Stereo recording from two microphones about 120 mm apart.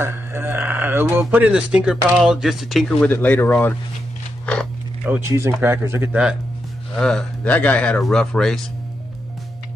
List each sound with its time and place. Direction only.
0.0 s speech: 20° right (ahead or behind); by 2.9 s centre (ahead or behind)
3.0 s speech: 15° left (ahead or behind)
5.0 s speech: 15° right (ahead or behind)
7.0 s speech: 5° left (ahead or behind)